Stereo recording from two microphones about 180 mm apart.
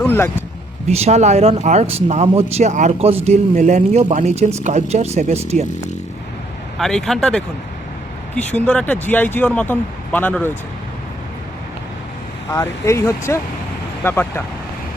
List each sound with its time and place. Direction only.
0.0 s a sound: 10° left (ahead or behind)
0.9 s speech: 35° right (ahead or behind)
6.7 s speech: centre (ahead or behind)
8.5 s speech: 5° left (ahead or behind)
12.5 s speech: 15° left (ahead or behind)